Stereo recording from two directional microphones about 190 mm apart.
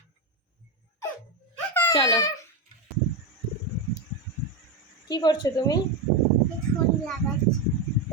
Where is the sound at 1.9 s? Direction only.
20° left (ahead or behind).